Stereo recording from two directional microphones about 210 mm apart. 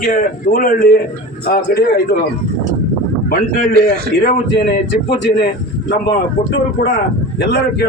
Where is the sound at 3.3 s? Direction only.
45° left (ahead or behind).